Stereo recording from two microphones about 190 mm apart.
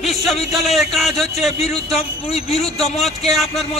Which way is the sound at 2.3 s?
35° left (ahead or behind).